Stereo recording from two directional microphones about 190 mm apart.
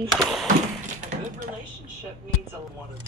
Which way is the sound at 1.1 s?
60° right (ahead or behind).